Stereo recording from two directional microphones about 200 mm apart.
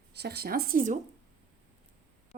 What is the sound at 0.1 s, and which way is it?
Speech, 55° right (ahead or behind).